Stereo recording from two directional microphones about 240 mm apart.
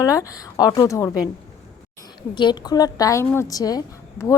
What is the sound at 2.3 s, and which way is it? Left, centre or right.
A woman's voice, centre.